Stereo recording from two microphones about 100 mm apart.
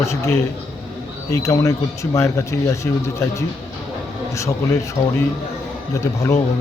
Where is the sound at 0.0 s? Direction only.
30° left (ahead or behind).